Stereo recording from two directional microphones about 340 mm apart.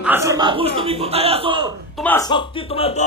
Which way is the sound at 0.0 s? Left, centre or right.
Centre.